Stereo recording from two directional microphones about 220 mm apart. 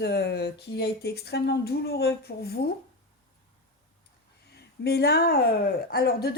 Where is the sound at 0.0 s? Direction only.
50° left (ahead or behind).